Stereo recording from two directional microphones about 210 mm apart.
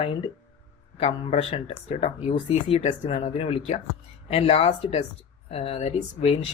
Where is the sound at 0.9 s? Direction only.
30° left (ahead or behind).